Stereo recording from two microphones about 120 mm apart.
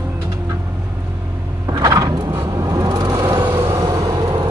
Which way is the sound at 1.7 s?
30° right (ahead or behind).